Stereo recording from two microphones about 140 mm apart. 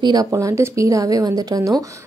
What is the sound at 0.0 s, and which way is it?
A woman's voice, 25° right (ahead or behind).